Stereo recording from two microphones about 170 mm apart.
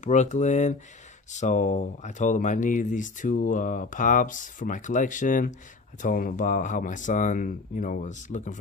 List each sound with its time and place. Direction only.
0.0 s speech: 45° left (ahead or behind)